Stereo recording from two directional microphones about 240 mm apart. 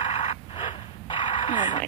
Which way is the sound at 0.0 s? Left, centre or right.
Left.